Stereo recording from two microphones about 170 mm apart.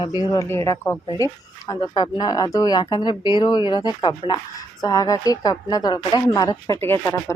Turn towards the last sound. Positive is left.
turn(degrees=15)  # may be behind; listen again after turning